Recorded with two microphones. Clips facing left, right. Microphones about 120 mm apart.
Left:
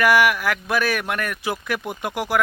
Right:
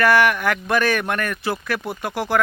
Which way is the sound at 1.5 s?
15° left (ahead or behind).